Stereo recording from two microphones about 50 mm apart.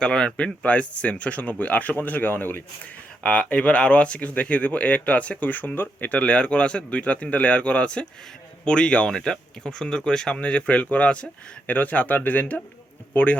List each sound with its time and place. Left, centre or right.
0.0 s speech: centre; by 2.6 s left
3.2 s speech: left
6.1 s speech: left
10.4 s speech: left